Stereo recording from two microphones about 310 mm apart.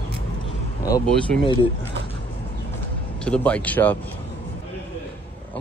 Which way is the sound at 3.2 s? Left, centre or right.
Centre.